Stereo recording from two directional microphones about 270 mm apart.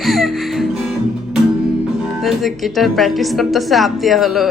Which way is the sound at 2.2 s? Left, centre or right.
Centre.